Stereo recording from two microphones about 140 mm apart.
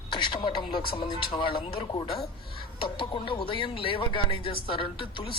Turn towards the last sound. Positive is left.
turn(degrees=35)  # may be behind; listen again after turning